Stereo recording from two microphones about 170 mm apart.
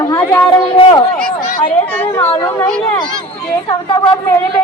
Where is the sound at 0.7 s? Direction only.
25° left (ahead or behind).